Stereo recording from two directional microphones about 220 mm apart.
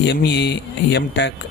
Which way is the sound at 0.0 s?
50° left (ahead or behind).